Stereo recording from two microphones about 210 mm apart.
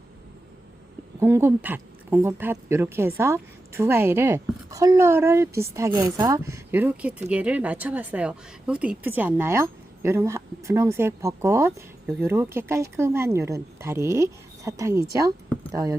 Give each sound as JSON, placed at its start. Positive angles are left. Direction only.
{"t": 1.2, "sound": "speech", "side_deg": -10}